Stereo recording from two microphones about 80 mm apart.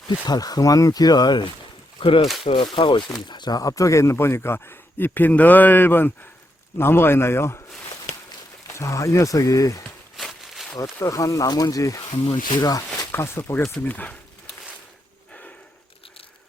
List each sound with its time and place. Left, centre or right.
0.3 s speech: left
2.0 s speech: left
3.2 s speech: left
8.7 s speech: left
10.2 s a sound: centre
10.8 s speech: left
12.2 s speech: left
12.6 s speech: left
13.1 s speech: left
13.8 s speech: centre